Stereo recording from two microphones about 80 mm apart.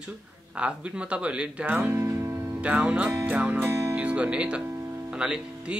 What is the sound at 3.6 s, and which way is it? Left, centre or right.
Music, right.